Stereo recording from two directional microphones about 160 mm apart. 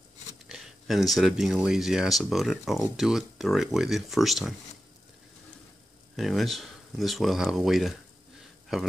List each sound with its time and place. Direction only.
0.5 s speech: centre (ahead or behind)
6.1 s speech: centre (ahead or behind)